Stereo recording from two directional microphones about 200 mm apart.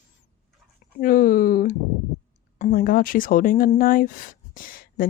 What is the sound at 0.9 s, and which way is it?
Speech, 45° left (ahead or behind).